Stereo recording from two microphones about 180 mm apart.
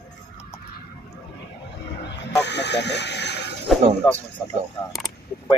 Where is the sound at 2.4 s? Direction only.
70° left (ahead or behind).